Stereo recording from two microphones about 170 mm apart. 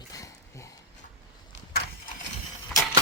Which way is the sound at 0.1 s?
20° left (ahead or behind).